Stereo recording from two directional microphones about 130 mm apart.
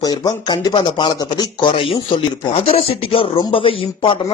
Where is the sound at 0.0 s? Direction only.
30° left (ahead or behind).